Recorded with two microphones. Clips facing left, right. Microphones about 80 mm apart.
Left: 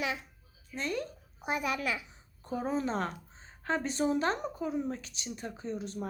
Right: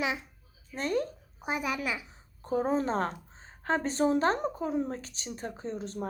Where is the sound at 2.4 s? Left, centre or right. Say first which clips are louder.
Right 4 dB; right.